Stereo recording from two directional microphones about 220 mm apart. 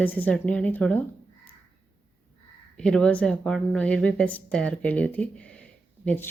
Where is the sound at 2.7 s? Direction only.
5° left (ahead or behind).